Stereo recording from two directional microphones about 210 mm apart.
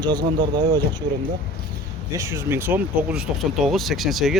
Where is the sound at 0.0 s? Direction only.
20° right (ahead or behind).